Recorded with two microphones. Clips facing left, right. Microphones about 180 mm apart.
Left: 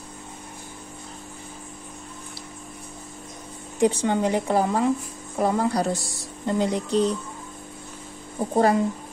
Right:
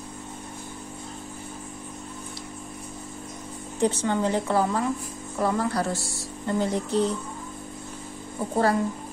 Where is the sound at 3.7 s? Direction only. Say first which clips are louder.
Left 3 dB; 15° left (ahead or behind).